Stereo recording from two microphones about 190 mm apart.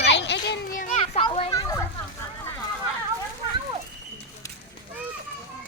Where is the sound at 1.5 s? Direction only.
20° left (ahead or behind).